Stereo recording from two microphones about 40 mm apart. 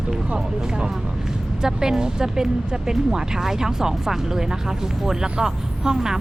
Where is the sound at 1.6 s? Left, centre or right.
Centre.